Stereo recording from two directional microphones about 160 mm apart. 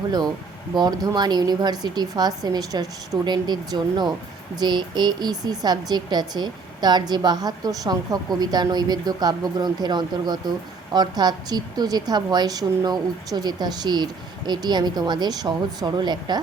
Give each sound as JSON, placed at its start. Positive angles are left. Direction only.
{"t": 0.7, "sound": "speech", "side_deg": -25}